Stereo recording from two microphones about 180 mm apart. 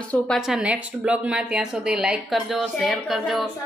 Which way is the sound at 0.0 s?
5° left (ahead or behind).